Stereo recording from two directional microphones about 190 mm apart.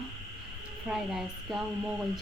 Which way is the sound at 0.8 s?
Centre (ahead or behind).